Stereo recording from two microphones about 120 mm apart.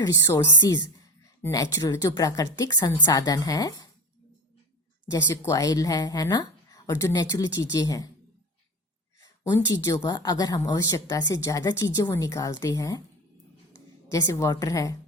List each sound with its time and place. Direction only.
0.0 s a woman's voice: 25° left (ahead or behind)
0.6 s a sound: 35° left (ahead or behind)
1.4 s a woman's voice: 25° left (ahead or behind)
5.1 s speech: 25° left (ahead or behind)
9.2 s a woman's voice: 30° left (ahead or behind)
14.1 s a woman's voice: 25° left (ahead or behind)